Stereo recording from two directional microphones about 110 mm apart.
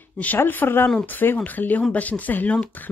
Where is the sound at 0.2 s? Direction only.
15° left (ahead or behind).